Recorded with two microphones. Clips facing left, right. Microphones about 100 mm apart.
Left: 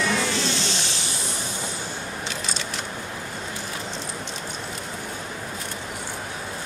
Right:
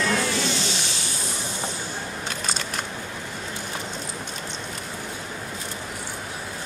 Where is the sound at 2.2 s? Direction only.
50° right (ahead or behind).